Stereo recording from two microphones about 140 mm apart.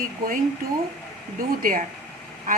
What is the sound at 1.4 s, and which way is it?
Speech, 90° right.